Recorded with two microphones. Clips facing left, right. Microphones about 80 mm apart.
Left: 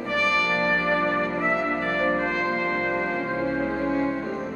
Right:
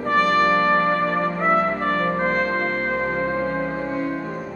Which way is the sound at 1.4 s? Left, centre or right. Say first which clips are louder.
Right 5 dB; right.